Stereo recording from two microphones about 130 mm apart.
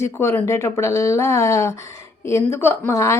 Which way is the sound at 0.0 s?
20° left (ahead or behind).